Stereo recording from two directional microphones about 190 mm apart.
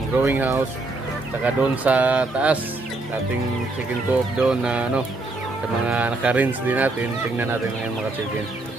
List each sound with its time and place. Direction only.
0.2 s speech: 10° right (ahead or behind)
4.4 s chicken: 5° right (ahead or behind)
5.9 s speech: 5° right (ahead or behind)